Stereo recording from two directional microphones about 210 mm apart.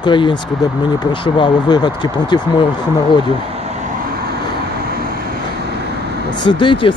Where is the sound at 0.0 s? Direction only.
20° left (ahead or behind).